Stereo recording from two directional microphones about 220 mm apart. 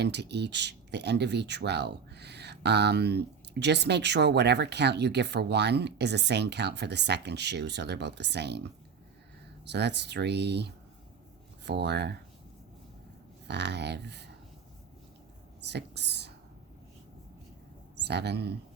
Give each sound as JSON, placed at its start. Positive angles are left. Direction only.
{"t": 0.0, "sound": "speech", "side_deg": -50}
{"t": 9.6, "sound": "speech", "side_deg": -50}
{"t": 13.5, "sound": "speech", "side_deg": -50}
{"t": 15.6, "sound": "speech", "side_deg": -50}
{"t": 18.0, "sound": "speech", "side_deg": -50}